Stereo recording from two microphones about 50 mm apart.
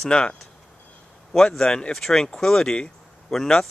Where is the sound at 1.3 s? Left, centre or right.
Centre.